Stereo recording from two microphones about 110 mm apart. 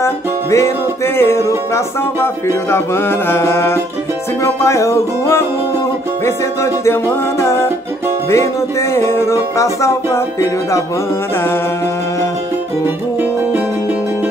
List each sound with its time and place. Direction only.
0.0 s music: 25° left (ahead or behind)
8.9 s music: 20° left (ahead or behind)